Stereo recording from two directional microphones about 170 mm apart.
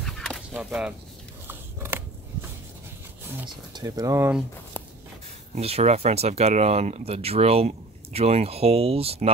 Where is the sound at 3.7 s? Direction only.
20° right (ahead or behind).